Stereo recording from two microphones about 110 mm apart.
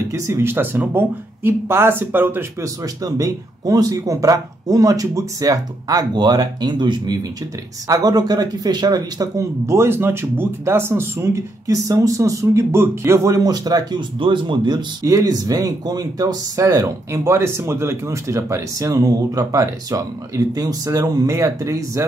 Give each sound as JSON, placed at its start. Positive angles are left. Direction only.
{"t": 0.0, "sound": "speech", "side_deg": -25}
{"t": 2.6, "sound": "speech", "side_deg": -35}
{"t": 14.2, "sound": "speech", "side_deg": -50}
{"t": 15.0, "sound": "speech", "side_deg": -30}